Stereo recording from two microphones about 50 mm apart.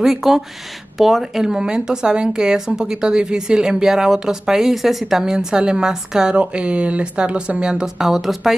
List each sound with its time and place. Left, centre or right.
0.0 s speech: centre